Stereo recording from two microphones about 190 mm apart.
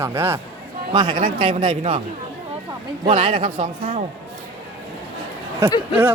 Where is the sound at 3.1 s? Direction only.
30° right (ahead or behind).